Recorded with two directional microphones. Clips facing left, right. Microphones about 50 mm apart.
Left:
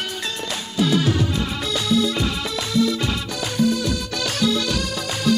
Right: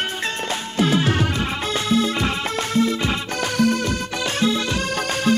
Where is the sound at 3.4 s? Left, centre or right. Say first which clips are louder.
Right 1 dB; right.